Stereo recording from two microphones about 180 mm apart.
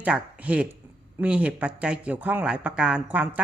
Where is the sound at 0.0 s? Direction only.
5° right (ahead or behind).